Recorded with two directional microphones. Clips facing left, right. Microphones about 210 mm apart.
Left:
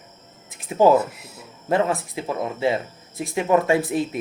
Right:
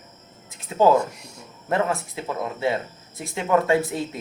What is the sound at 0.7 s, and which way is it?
Speech, 20° left (ahead or behind).